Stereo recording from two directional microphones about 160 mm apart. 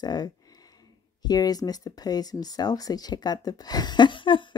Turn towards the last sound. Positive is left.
turn(degrees=30)  # may be behind; listen again after turning